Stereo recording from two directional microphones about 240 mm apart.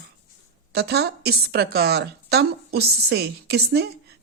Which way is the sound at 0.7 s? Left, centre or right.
Right.